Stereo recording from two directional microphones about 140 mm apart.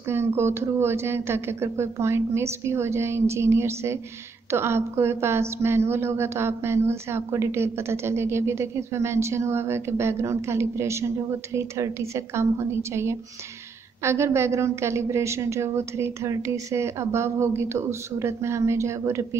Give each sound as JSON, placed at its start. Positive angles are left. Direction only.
{"t": 0.1, "sound": "a woman's voice", "side_deg": -15}